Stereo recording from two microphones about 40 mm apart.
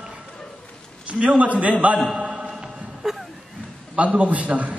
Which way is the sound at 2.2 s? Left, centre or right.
Centre.